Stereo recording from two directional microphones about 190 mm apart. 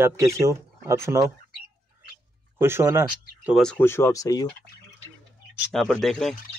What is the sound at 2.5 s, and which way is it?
Speech, 10° right (ahead or behind).